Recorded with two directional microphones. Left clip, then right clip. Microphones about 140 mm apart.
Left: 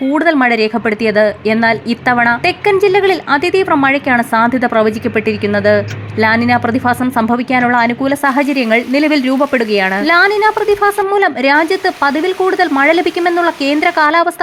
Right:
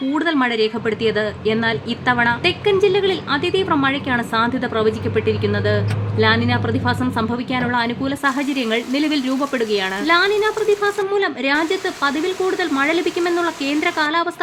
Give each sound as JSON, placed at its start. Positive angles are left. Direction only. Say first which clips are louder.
{"t": 0.1, "sound": "a woman's voice", "louder": "left 8 dB", "side_deg": 35}